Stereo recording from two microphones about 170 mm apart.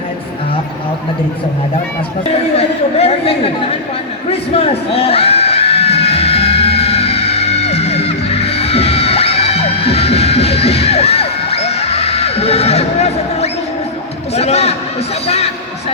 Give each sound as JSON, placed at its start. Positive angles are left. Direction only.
{"t": 2.6, "sound": "speech", "side_deg": 35}
{"t": 4.3, "sound": "crowd", "side_deg": 35}
{"t": 14.3, "sound": "a sound", "side_deg": 40}